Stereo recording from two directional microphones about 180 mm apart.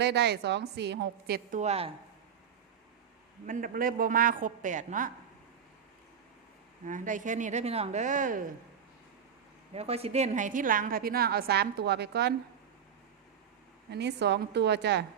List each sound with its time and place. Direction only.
0.0 s a woman's voice: 70° right (ahead or behind)
1.5 s a woman's voice: 35° right (ahead or behind)
3.4 s a woman's voice: 50° right (ahead or behind)
6.8 s a woman's voice: 45° right (ahead or behind)
9.7 s a woman's voice: 35° right (ahead or behind); by 12.3 s 65° right (ahead or behind)
13.9 s a woman's voice: 70° right (ahead or behind)